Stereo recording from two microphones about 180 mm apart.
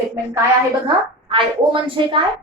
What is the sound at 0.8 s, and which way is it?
A woman's voice, 30° right (ahead or behind).